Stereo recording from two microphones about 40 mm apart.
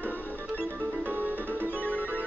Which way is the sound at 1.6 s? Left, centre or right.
Left.